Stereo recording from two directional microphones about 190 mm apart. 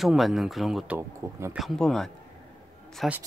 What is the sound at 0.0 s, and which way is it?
Speech, centre (ahead or behind).